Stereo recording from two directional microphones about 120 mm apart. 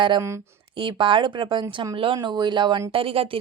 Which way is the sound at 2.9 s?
50° right (ahead or behind).